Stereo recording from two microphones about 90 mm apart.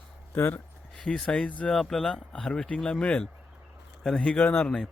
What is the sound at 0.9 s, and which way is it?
Speech, 5° left (ahead or behind).